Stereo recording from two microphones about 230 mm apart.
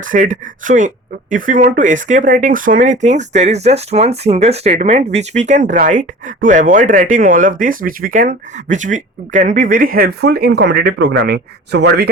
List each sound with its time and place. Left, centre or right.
0.0 s speech: right